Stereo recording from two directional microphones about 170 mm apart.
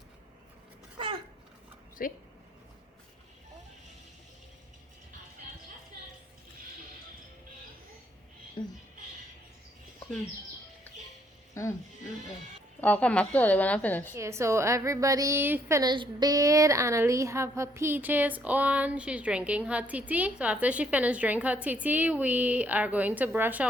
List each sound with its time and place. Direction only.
0.9 s babbling: 30° right (ahead or behind)
2.0 s speech: 55° left (ahead or behind)
8.6 s a sound: 25° left (ahead or behind)
12.8 s a woman's voice: 10° left (ahead or behind)
14.2 s a woman's voice: 15° right (ahead or behind)
15.8 s a woman's voice: 25° right (ahead or behind)